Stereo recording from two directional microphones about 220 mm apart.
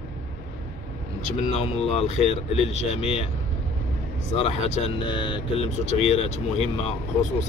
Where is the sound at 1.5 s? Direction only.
30° left (ahead or behind).